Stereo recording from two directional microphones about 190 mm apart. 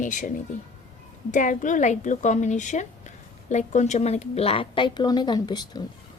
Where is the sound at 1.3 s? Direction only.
40° left (ahead or behind); by 5.8 s 20° left (ahead or behind).